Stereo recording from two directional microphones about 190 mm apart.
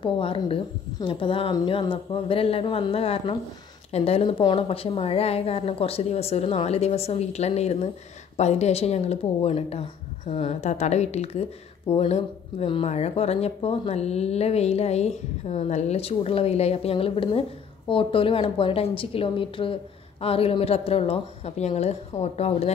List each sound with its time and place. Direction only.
0.0 s a woman's voice: 30° left (ahead or behind)